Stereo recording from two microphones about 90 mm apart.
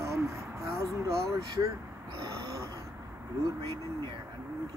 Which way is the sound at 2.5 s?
35° right (ahead or behind).